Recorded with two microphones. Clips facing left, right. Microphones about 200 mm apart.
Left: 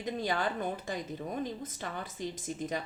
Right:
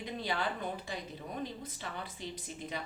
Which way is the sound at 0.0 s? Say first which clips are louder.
Left 4 dB; 45° left (ahead or behind).